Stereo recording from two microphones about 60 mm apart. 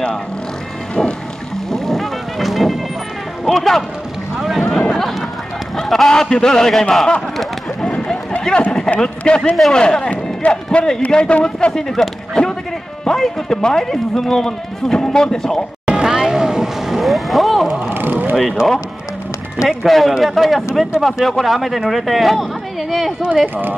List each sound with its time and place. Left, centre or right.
1.7 s music: centre
4.6 s a sound: centre
5.8 s speech: centre
7.9 s a sound: left
9.0 s speech: centre
15.8 s vehicle: centre
17.9 s vehicle: right
18.3 s speech: centre
19.8 s speech: centre